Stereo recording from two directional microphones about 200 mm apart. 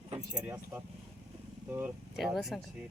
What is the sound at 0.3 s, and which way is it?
Speech, 10° right (ahead or behind).